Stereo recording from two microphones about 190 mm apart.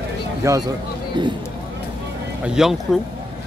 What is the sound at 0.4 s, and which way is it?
Speech, 15° right (ahead or behind).